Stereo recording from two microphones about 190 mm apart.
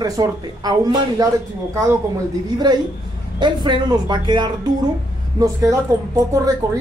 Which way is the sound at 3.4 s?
25° right (ahead or behind).